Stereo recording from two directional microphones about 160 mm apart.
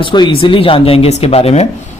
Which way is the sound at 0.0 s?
30° left (ahead or behind).